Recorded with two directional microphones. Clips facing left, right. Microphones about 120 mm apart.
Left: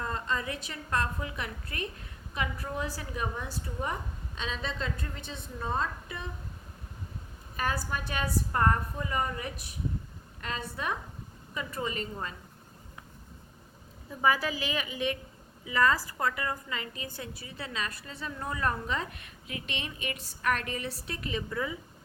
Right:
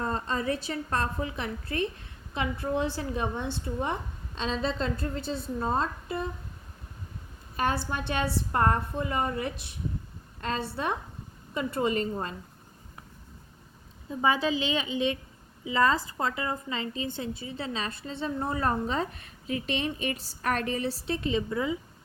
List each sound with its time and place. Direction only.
0.0 s a woman's voice: 35° right (ahead or behind)
7.5 s a woman's voice: 30° right (ahead or behind)
14.1 s a woman's voice: 20° right (ahead or behind)